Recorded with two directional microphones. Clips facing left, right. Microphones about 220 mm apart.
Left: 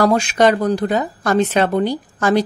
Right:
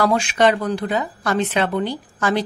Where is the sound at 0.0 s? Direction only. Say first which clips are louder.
Left 3 dB; 40° left (ahead or behind).